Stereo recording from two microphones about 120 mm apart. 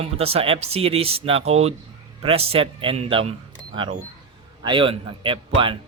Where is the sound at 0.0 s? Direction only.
55° right (ahead or behind).